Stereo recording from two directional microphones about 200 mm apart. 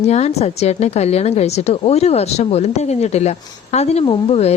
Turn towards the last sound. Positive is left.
turn(degrees=30)  # may be behind; listen again after turning